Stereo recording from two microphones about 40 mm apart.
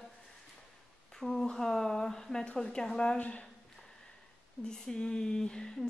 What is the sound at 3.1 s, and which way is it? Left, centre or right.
Speech, left.